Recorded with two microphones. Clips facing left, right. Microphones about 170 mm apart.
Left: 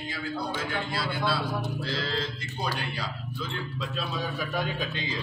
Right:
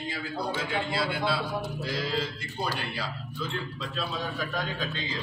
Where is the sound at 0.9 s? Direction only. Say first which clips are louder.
Right 1 dB; 25° right (ahead or behind).